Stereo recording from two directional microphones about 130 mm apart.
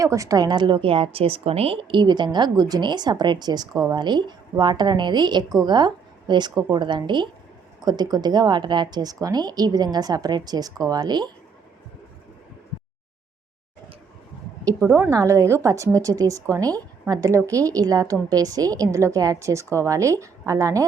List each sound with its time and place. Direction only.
0.0 s a woman's voice: 25° right (ahead or behind)
14.6 s a woman's voice: 30° right (ahead or behind)
14.8 s a woman's voice: 10° right (ahead or behind)
15.1 s a woman's voice: 25° right (ahead or behind)